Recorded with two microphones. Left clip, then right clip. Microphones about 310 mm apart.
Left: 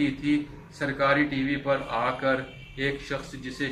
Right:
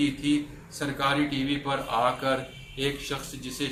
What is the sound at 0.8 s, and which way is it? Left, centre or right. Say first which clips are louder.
Speech: left 3 dB; centre.